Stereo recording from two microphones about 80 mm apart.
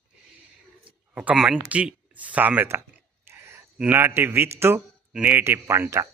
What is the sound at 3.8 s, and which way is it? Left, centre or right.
A man's voice, right.